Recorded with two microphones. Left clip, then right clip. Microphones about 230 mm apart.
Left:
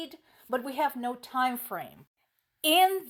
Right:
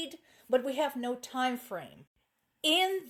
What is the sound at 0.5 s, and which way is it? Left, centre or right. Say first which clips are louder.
Speech: even; left.